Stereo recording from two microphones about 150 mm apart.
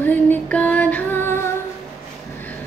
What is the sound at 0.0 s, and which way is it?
Music, 10° left (ahead or behind).